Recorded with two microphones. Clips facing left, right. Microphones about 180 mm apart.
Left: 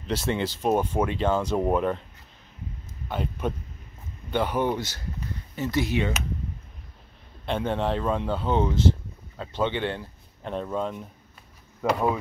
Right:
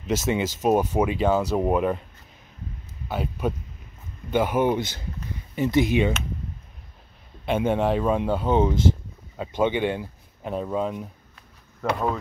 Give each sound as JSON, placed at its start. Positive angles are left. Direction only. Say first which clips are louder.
{"t": 0.6, "sound": "speech", "louder": "right 3 dB", "side_deg": -10}
{"t": 3.1, "sound": "speech", "louder": "right 2 dB", "side_deg": -5}
{"t": 7.4, "sound": "speech", "louder": "right 4 dB", "side_deg": -10}
{"t": 11.8, "sound": "speech", "louder": "left 1 dB", "side_deg": 5}